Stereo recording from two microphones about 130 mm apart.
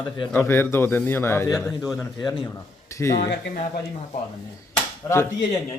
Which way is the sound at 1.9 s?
5° left (ahead or behind).